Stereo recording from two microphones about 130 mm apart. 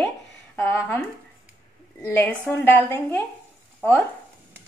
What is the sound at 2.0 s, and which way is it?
A woman's voice, 15° left (ahead or behind).